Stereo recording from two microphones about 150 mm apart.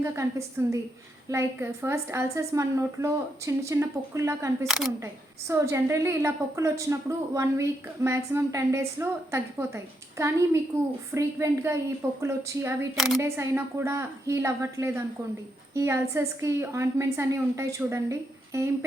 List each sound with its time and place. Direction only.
0.0 s a woman's voice: 20° right (ahead or behind)
4.6 s speech: centre (ahead or behind)
5.5 s a woman's voice: 20° right (ahead or behind)